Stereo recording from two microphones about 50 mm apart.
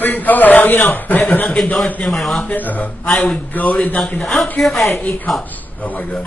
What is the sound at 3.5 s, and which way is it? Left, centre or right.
Speech, left.